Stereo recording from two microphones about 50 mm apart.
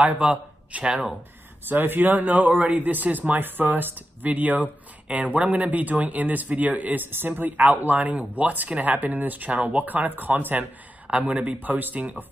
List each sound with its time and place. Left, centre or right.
0.0 s speech: right
1.7 s speech: right
11.1 s speech: right